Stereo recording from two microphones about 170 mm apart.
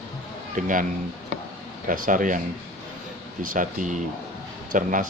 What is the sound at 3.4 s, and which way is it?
Speech, 50° right (ahead or behind).